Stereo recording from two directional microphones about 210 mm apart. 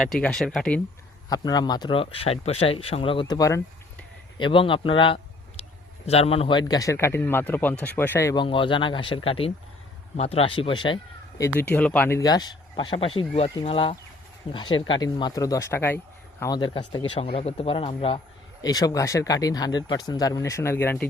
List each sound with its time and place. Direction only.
0.0 s speech: 5° left (ahead or behind)
1.3 s speech: 20° left (ahead or behind)